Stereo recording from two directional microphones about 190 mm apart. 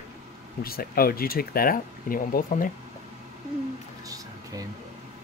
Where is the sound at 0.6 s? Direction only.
50° left (ahead or behind).